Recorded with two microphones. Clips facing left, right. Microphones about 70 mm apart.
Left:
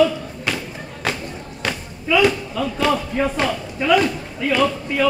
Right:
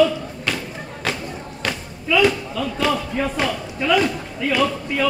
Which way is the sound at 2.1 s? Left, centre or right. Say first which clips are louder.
Left 1 dB; centre.